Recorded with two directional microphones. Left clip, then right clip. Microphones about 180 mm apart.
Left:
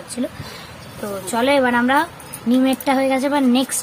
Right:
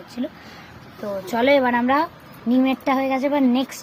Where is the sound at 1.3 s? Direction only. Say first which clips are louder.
Left 1 dB; 20° right (ahead or behind); by 3.6 s centre (ahead or behind).